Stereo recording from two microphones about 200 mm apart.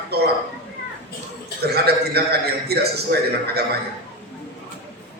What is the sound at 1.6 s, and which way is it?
A man's voice, 55° right (ahead or behind).